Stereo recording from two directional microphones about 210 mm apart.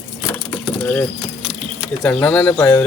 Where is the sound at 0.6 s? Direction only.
5° left (ahead or behind).